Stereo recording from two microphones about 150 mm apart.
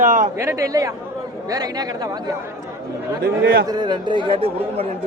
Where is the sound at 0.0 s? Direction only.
65° right (ahead or behind).